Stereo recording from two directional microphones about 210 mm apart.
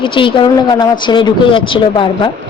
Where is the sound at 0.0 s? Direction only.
25° left (ahead or behind).